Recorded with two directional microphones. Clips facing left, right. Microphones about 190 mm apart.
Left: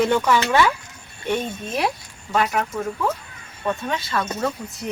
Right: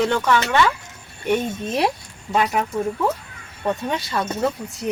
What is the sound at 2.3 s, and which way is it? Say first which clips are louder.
Speech: right 1 dB; 15° right (ahead or behind).